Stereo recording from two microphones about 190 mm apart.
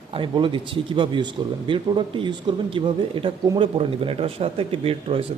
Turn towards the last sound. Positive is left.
turn(degrees=-30)  # may be behind; listen again after turning